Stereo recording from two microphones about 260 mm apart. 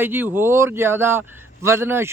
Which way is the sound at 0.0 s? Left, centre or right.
Centre.